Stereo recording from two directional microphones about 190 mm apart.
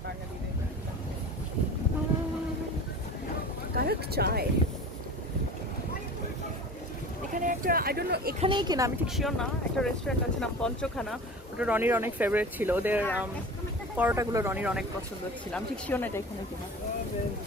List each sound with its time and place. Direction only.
3.7 s speech: 55° right (ahead or behind)
7.3 s a sound: 45° right (ahead or behind)
8.4 s speech: 25° right (ahead or behind)
9.0 s speech: centre (ahead or behind)
15.5 s speech: 5° left (ahead or behind)